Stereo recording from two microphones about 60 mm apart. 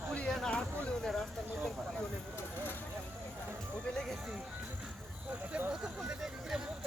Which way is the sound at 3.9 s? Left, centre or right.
Centre.